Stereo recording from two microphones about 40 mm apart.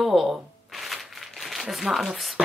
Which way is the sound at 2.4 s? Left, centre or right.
Right.